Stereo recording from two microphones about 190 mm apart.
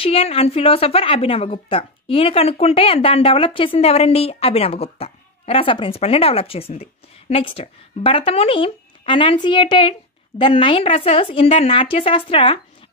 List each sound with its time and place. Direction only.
0.0 s speech: 30° left (ahead or behind)